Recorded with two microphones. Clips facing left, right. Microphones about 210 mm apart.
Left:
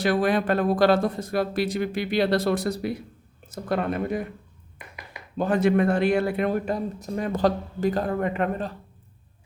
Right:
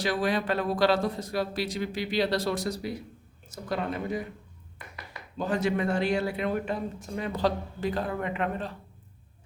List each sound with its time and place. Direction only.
0.0 s a man's voice: 55° left (ahead or behind)
5.4 s a man's voice: 55° left (ahead or behind)